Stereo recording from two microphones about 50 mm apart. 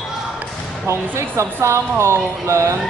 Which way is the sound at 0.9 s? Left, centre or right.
Right.